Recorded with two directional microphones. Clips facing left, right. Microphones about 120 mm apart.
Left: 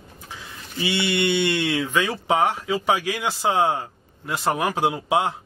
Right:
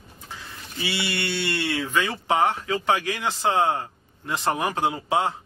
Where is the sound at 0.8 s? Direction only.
20° left (ahead or behind).